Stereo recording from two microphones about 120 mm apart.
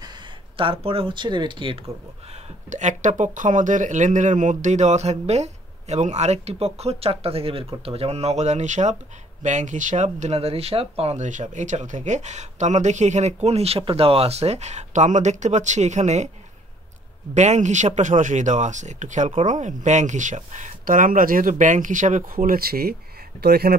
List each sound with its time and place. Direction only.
0.6 s speech: 50° right (ahead or behind)
2.7 s speech: 90° right; by 16.3 s 75° right (ahead or behind)
17.3 s speech: 75° right (ahead or behind)